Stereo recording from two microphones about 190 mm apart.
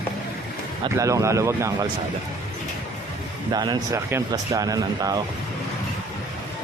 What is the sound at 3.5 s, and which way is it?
Speech, 20° right (ahead or behind).